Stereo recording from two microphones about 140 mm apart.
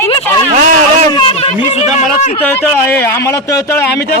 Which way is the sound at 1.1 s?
35° left (ahead or behind).